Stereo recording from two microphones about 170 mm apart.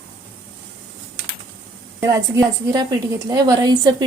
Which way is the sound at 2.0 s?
20° right (ahead or behind).